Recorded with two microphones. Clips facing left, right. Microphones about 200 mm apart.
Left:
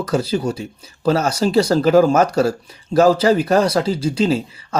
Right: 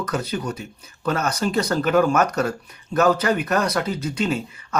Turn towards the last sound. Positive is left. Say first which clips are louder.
# left 6 dB
turn(degrees=30)  # may be behind; listen again after turning